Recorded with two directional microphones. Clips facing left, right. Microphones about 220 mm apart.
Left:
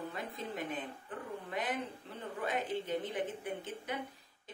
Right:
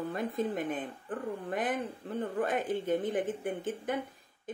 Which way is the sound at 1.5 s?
50° right (ahead or behind).